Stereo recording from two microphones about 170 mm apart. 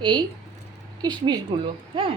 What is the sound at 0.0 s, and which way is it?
Speech, 25° right (ahead or behind).